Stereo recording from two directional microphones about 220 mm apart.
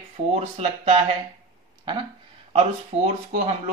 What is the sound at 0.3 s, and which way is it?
Speech, 30° right (ahead or behind).